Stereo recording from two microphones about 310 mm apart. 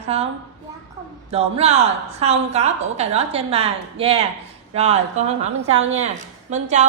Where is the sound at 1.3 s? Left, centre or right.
Centre.